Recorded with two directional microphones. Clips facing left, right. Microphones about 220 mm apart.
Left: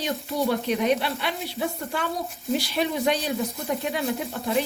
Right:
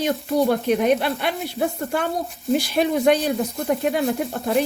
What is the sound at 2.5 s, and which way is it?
Speech, 50° right (ahead or behind).